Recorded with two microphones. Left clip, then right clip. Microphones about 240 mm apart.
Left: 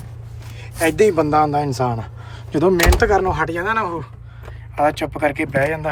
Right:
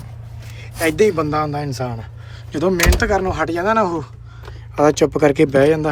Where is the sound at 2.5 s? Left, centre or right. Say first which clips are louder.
Left 2 dB; centre.